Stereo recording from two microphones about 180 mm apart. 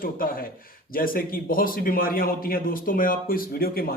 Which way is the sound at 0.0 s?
50° left (ahead or behind).